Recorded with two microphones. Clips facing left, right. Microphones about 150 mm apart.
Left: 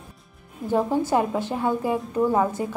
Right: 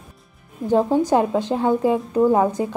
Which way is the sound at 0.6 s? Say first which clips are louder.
Right 5 dB; 15° right (ahead or behind).